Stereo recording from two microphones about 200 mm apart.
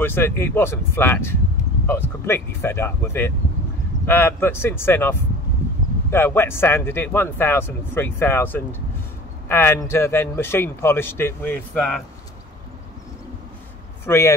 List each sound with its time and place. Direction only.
0.0 s speech: 10° left (ahead or behind)
14.0 s speech: 10° left (ahead or behind)